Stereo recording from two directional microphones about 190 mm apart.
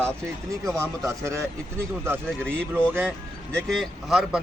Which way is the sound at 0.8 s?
15° right (ahead or behind).